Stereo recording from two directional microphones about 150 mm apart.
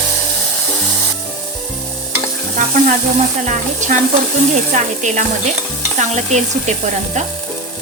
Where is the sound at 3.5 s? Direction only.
55° right (ahead or behind).